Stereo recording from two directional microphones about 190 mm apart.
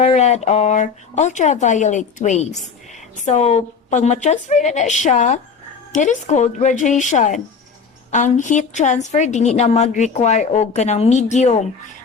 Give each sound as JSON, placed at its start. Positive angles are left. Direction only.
{"t": 0.0, "sound": "a woman's voice", "side_deg": 35}